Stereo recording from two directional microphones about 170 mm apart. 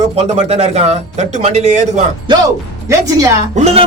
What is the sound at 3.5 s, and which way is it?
Speech, 40° right (ahead or behind).